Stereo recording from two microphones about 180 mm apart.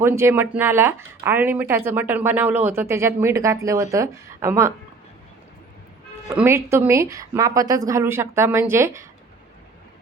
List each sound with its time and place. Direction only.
0.0 s speech: 15° right (ahead or behind)
6.3 s speech: 15° right (ahead or behind)